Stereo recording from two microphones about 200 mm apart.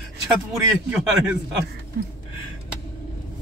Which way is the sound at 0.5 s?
5° right (ahead or behind).